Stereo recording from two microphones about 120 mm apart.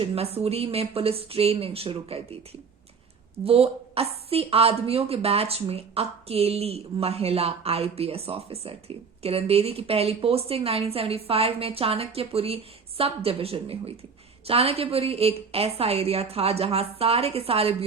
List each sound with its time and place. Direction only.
0.0 s a woman's voice: 55° right (ahead or behind)